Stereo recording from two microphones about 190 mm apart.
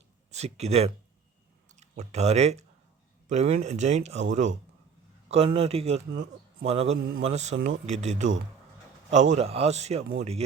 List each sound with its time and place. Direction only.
0.3 s speech: 35° right (ahead or behind)
5.5 s speech: 30° right (ahead or behind)